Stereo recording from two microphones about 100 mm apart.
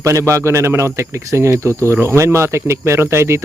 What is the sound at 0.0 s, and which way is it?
Speech, 30° right (ahead or behind).